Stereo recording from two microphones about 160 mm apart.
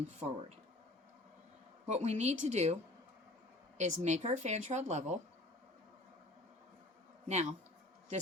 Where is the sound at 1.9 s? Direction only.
45° right (ahead or behind).